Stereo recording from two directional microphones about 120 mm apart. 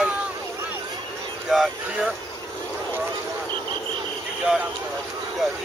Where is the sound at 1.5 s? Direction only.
Centre (ahead or behind).